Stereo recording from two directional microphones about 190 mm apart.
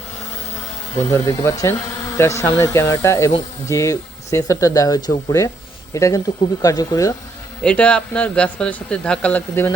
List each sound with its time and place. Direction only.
1.5 s speech: 15° left (ahead or behind)
7.6 s a man's voice: 5° left (ahead or behind)